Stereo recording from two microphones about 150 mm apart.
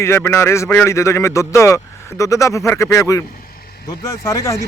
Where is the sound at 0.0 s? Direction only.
15° left (ahead or behind).